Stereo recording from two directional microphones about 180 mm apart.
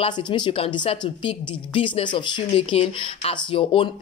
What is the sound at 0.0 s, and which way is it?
A woman's voice, 30° left (ahead or behind).